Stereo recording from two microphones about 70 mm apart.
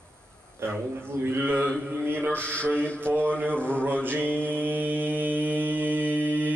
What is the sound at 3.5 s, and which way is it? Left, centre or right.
Speech, centre.